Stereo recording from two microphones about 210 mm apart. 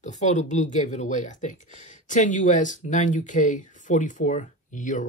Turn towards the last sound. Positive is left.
turn(degrees=35)  # may be behind; listen again after turning